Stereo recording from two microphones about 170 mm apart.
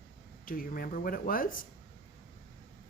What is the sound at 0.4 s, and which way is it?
Speech, 55° left (ahead or behind).